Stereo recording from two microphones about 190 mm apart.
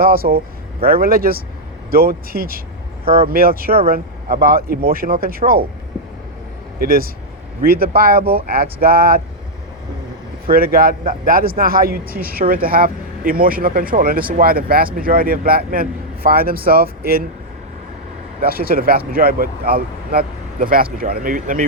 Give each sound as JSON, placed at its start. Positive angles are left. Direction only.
{"t": 0.0, "sound": "speech", "side_deg": -50}
{"t": 3.0, "sound": "speech", "side_deg": -30}
{"t": 3.2, "sound": "speech", "side_deg": -50}
{"t": 6.7, "sound": "speech", "side_deg": -50}
{"t": 10.5, "sound": "speech", "side_deg": -50}
{"t": 18.3, "sound": "speech", "side_deg": -50}